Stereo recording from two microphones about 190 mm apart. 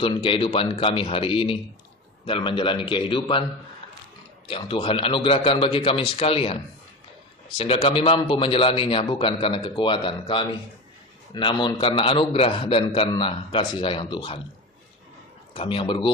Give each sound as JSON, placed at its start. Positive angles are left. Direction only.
{"t": 0.0, "sound": "a man's voice", "side_deg": 25}
{"t": 4.4, "sound": "a man's voice", "side_deg": 25}
{"t": 15.5, "sound": "a man's voice", "side_deg": 30}